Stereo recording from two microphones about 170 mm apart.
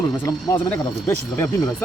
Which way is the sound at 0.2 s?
10° left (ahead or behind).